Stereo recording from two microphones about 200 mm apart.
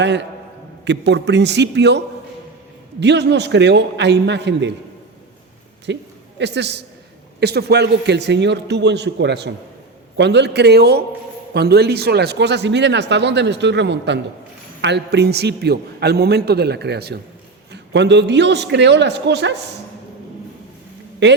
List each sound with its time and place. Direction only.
0.0 s a man's voice: 60° right (ahead or behind)
3.0 s a man's voice: 60° right (ahead or behind)
5.9 s a man's voice: 60° right (ahead or behind)
21.2 s a man's voice: 60° right (ahead or behind)